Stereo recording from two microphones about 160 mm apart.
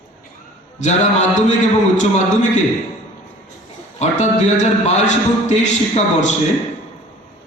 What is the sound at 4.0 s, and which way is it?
A man's voice, 45° left (ahead or behind).